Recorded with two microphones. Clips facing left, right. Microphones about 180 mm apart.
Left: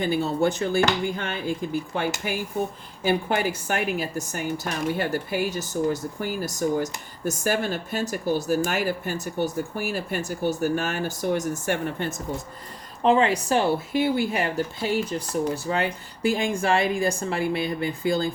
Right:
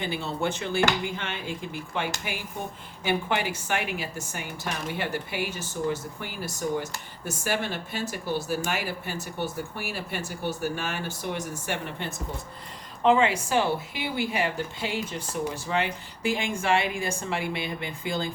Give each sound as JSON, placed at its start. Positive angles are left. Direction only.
{"t": 0.0, "sound": "speech", "side_deg": 40}